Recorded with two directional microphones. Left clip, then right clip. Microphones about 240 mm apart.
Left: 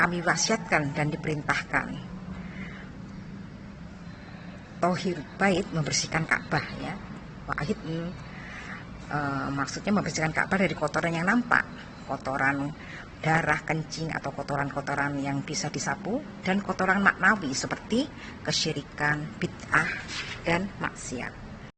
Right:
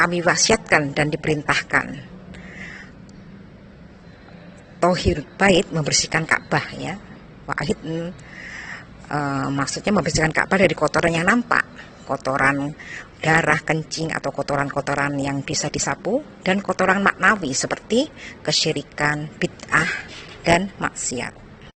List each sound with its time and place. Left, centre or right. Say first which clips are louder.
0.0 s speech: right 7 dB; right
5.4 s a woman's voice: right 9 dB; right
9.0 s speech: right 6 dB; right